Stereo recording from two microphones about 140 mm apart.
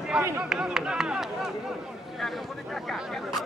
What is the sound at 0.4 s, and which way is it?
Speech, 5° right (ahead or behind).